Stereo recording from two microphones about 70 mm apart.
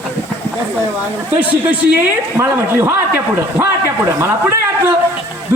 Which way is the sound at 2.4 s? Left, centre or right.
Right.